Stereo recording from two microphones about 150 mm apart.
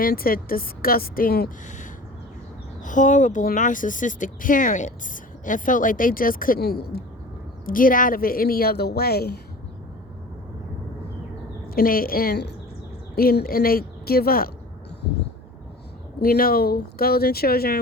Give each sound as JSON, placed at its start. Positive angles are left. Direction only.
{"t": 0.0, "sound": "a woman's voice", "side_deg": 80}
{"t": 2.8, "sound": "a woman's voice", "side_deg": 60}
{"t": 7.6, "sound": "a woman's voice", "side_deg": 65}
{"t": 11.7, "sound": "a woman's voice", "side_deg": 75}
{"t": 16.2, "sound": "speech", "side_deg": 80}